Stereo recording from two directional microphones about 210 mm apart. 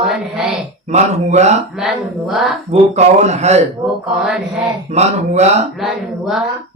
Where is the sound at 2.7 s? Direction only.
30° right (ahead or behind).